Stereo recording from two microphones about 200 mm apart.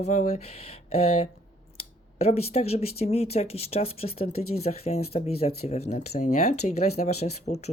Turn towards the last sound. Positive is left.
turn(degrees=35)  # may be behind; listen again after turning